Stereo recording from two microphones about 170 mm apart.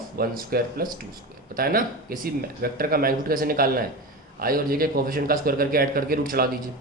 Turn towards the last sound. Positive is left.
turn(degrees=-60)  # may be behind; listen again after turning